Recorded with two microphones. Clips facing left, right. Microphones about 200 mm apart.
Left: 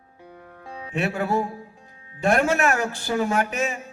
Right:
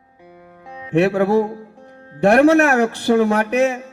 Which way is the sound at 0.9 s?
65° right (ahead or behind).